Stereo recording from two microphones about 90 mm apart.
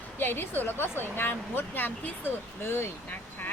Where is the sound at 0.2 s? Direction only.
20° left (ahead or behind).